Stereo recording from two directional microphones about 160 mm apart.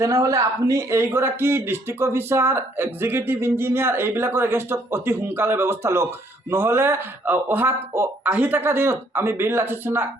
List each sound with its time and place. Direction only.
0.0 s speech: 20° right (ahead or behind)